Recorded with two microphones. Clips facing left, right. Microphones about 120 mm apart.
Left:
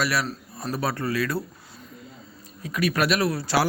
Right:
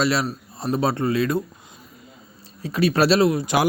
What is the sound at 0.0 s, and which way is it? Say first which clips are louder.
Speech: right 4 dB; 25° right (ahead or behind).